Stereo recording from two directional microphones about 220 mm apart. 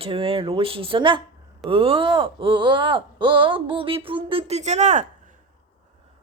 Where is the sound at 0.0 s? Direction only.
25° right (ahead or behind).